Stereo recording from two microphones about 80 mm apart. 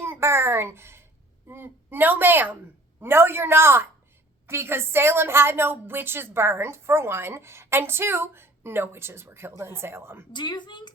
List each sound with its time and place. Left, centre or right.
0.0 s a sound: right
1.5 s a woman's voice: right
10.3 s a woman's voice: left